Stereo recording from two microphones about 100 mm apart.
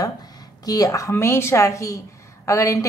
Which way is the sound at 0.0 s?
40° left (ahead or behind).